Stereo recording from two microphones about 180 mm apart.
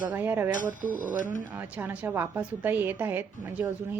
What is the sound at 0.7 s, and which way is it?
Speech, 45° right (ahead or behind).